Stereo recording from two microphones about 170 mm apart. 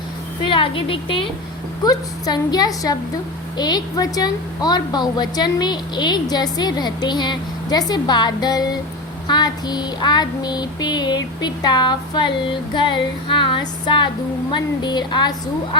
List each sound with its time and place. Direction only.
0.4 s a woman's voice: 30° left (ahead or behind)